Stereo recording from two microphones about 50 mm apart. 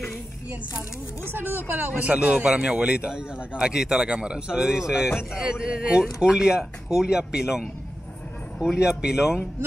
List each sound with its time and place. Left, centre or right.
1.3 s speech: right
2.0 s a man's voice: right